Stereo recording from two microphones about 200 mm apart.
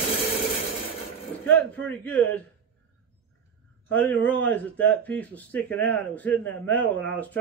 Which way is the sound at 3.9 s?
10° left (ahead or behind).